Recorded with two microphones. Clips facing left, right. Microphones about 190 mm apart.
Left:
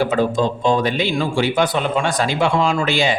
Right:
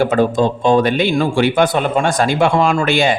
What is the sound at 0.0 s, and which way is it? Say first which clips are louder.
Speech: right 3 dB; 50° right (ahead or behind).